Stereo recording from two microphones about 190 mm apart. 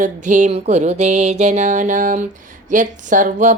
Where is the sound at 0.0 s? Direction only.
40° right (ahead or behind).